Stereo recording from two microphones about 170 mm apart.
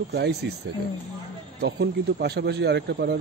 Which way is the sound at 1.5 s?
85° right.